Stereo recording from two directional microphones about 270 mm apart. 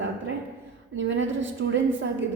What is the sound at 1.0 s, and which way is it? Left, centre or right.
Speech, right.